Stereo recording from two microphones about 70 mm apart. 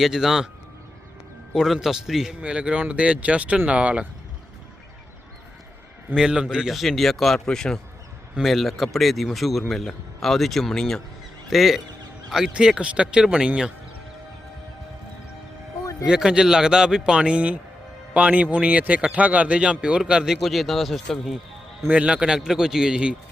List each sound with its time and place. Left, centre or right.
0.0 s speech: centre
1.5 s speech: centre
6.1 s speech: centre
6.7 s speech: centre
16.0 s a man's voice: centre
21.8 s speech: centre